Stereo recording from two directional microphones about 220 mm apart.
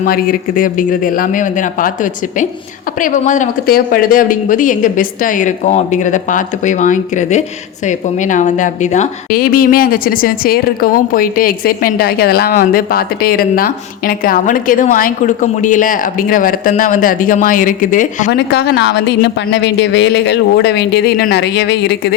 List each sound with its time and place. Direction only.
0.0 s a woman's voice: 40° left (ahead or behind)
18.3 s speech: 50° left (ahead or behind)